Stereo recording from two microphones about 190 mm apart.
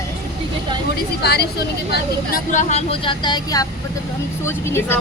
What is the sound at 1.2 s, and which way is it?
A woman's voice, 60° left (ahead or behind).